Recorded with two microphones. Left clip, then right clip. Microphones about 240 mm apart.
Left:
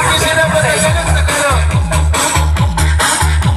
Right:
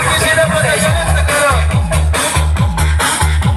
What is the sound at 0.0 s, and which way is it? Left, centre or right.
Music, left.